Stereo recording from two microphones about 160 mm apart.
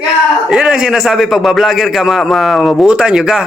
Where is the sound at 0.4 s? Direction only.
5° right (ahead or behind).